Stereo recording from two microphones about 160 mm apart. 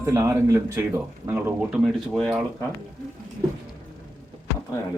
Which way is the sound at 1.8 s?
Centre (ahead or behind).